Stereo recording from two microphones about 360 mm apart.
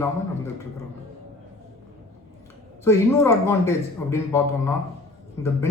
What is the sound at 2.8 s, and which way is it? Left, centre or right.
Speech, centre.